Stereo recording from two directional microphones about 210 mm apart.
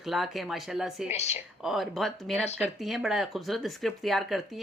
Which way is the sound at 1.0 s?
30° left (ahead or behind).